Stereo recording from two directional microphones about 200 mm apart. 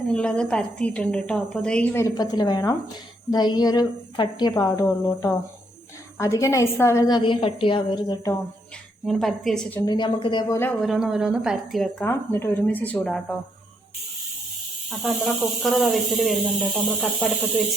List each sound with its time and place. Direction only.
0.1 s a woman's voice: 5° left (ahead or behind)
9.0 s speech: centre (ahead or behind)
9.8 s a woman's voice: 20° left (ahead or behind)
10.6 s speech: 5° left (ahead or behind)
14.8 s speech: centre (ahead or behind)